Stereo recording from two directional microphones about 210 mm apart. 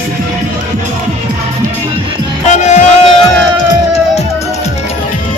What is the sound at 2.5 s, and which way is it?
Music, 35° left (ahead or behind).